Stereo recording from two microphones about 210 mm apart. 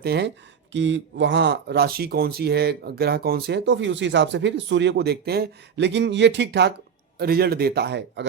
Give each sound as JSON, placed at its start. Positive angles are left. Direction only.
{"t": 0.0, "sound": "speech", "side_deg": -50}